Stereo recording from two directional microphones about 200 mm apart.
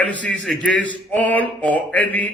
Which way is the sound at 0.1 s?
5° left (ahead or behind).